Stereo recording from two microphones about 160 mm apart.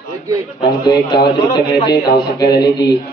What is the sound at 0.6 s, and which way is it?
A man's voice, 25° left (ahead or behind).